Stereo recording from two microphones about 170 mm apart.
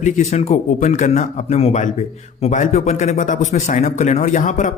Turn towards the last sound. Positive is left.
turn(degrees=45)  # may be behind; listen again after turning